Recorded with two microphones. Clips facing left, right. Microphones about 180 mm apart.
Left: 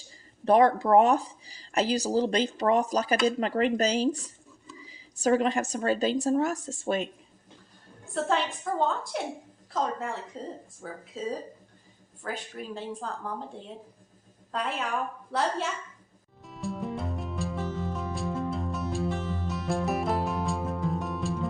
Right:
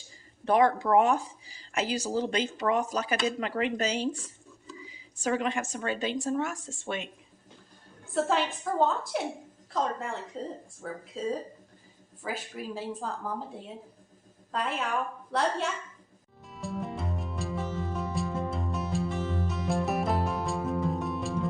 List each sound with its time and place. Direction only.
0.4 s speech: 35° left (ahead or behind)
8.0 s a woman's voice: centre (ahead or behind)
12.2 s a woman's voice: 5° right (ahead or behind)
16.4 s music: centre (ahead or behind)